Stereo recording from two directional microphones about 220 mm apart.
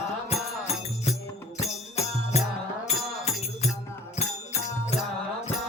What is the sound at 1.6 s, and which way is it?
Music, 30° left (ahead or behind).